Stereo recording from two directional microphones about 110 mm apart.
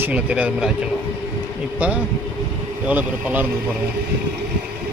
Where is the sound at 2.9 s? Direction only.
15° right (ahead or behind).